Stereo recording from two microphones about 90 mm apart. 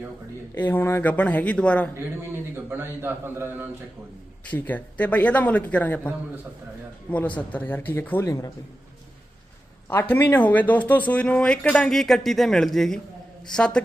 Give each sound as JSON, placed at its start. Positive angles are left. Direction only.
{"t": 0.5, "sound": "speech", "side_deg": 25}
{"t": 2.6, "sound": "a man's voice", "side_deg": -25}
{"t": 4.5, "sound": "speech", "side_deg": 15}
{"t": 9.9, "sound": "speech", "side_deg": 25}